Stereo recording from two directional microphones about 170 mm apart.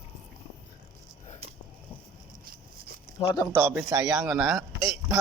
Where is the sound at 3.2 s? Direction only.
30° left (ahead or behind).